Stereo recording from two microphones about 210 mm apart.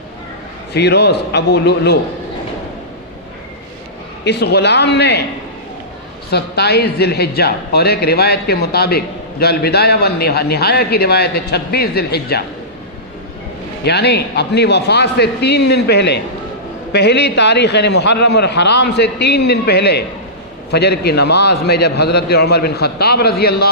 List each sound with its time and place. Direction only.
0.7 s a man's voice: 50° left (ahead or behind)
4.2 s a man's voice: 55° left (ahead or behind)
6.3 s a man's voice: 50° left (ahead or behind)
13.8 s a man's voice: 50° left (ahead or behind)